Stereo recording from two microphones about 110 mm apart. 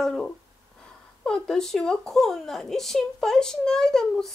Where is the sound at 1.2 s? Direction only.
5° left (ahead or behind).